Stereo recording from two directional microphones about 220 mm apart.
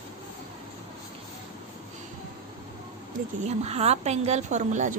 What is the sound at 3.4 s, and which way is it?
A woman's voice, 30° right (ahead or behind).